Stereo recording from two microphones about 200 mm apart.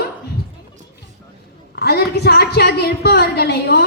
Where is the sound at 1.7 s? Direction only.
55° left (ahead or behind).